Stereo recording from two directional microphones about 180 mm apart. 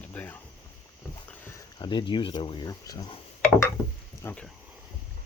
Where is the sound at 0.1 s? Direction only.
10° left (ahead or behind).